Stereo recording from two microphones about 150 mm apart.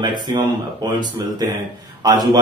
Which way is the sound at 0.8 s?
30° right (ahead or behind).